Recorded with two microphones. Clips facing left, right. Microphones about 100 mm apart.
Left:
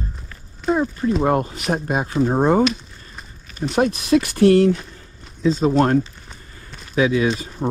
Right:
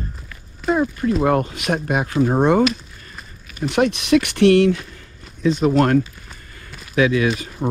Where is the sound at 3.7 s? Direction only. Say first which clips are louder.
Right 1 dB; 90° right; by 7.3 s 70° right (ahead or behind).